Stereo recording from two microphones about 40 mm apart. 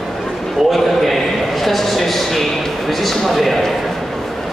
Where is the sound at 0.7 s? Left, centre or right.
Centre.